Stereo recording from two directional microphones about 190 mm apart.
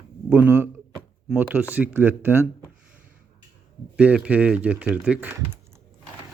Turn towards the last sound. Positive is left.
turn(degrees=-5)  # may be behind; listen again after turning